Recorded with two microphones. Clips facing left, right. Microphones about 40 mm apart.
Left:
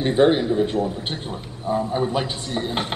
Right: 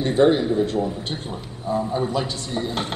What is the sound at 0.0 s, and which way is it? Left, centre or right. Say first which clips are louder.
A man's voice: even; left.